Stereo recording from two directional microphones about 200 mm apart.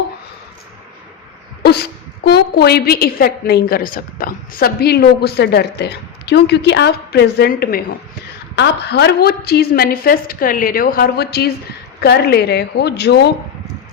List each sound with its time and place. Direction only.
1.6 s a woman's voice: 55° left (ahead or behind)